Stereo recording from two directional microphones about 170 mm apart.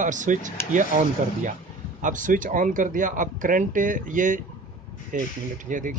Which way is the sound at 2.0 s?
50° right (ahead or behind).